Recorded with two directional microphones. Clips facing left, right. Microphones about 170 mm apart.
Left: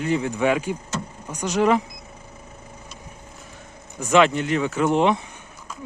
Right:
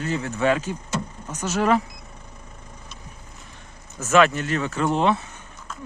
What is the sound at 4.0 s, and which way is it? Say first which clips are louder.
Speech: left 1 dB; 15° left (ahead or behind).